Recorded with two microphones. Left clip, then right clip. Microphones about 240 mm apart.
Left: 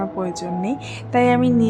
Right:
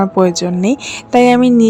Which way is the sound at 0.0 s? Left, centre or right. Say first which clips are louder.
Right 12 dB; right.